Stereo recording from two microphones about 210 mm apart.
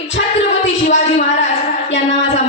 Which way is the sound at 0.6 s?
30° left (ahead or behind).